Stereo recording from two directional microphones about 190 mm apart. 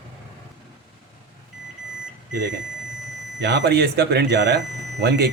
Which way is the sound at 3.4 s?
65° right (ahead or behind).